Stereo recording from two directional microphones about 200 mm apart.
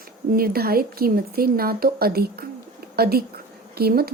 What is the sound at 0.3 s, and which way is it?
A woman's voice, 50° right (ahead or behind).